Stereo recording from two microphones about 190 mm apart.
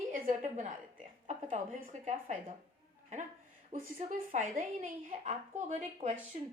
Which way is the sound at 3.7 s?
45° right (ahead or behind).